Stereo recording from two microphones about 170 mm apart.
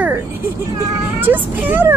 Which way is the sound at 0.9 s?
10° right (ahead or behind).